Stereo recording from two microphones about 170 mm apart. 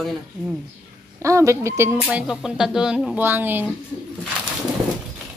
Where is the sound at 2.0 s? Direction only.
5° right (ahead or behind).